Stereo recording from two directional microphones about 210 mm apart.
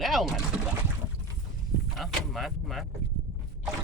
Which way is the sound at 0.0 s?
Centre (ahead or behind).